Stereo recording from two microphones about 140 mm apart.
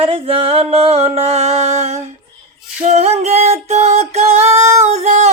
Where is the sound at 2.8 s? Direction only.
50° right (ahead or behind).